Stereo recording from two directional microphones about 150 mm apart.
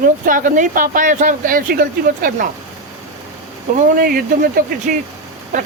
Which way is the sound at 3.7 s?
70° right (ahead or behind).